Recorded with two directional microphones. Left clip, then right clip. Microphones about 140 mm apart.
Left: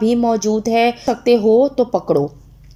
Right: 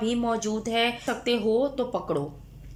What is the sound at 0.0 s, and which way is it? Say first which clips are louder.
Speech: left 11 dB; 35° left (ahead or behind).